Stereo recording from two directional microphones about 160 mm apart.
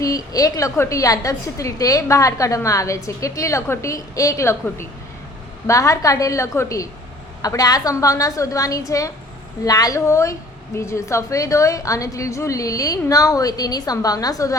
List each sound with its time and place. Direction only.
0.0 s a woman's voice: 20° left (ahead or behind)
5.6 s a woman's voice: 20° left (ahead or behind)